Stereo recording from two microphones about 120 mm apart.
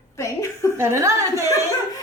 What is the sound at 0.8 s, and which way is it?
Speech, 25° right (ahead or behind).